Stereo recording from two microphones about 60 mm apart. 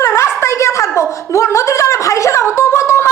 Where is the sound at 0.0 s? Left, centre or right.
Left.